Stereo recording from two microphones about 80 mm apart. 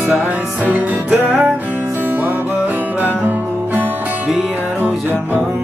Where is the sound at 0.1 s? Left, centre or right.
Centre.